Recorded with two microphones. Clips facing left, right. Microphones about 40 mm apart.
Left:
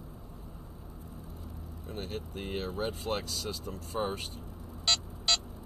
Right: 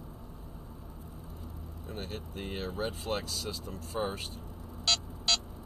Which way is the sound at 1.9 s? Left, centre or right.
Left.